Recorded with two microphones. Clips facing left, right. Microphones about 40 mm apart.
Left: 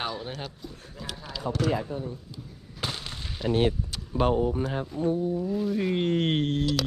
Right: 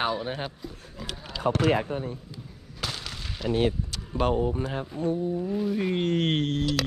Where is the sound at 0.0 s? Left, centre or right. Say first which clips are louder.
Right 5 dB; centre.